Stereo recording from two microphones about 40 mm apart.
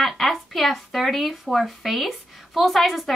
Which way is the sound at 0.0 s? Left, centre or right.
Centre.